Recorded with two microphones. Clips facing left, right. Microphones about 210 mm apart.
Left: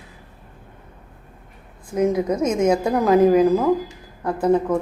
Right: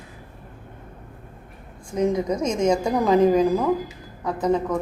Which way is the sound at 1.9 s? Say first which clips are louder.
Left 2 dB; 5° left (ahead or behind).